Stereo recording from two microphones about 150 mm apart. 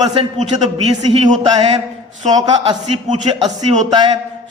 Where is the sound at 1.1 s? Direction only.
35° right (ahead or behind).